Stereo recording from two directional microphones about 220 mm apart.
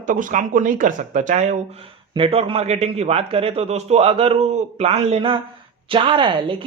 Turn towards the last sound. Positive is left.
turn(degrees=-25)  # may be behind; listen again after turning